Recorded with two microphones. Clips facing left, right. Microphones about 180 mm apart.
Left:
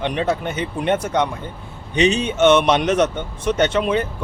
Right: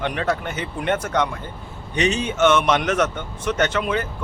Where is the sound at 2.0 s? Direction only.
15° left (ahead or behind).